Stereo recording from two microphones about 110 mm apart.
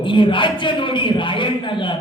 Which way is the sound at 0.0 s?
50° left (ahead or behind).